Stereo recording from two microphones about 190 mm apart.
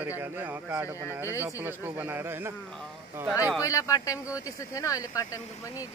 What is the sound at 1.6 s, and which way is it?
A man's voice, 10° right (ahead or behind).